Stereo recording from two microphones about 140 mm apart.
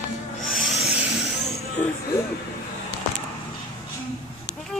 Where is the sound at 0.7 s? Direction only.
Centre (ahead or behind).